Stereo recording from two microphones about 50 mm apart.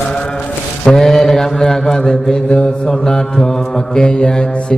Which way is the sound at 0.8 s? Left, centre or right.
Centre.